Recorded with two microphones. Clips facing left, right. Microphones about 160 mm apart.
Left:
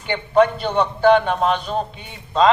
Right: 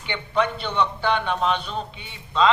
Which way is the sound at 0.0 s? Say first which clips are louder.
Left 8 dB; 45° left (ahead or behind).